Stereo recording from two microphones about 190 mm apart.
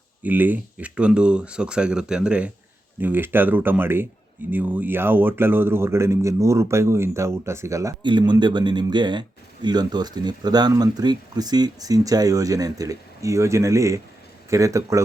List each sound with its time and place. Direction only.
0.2 s speech: 10° right (ahead or behind)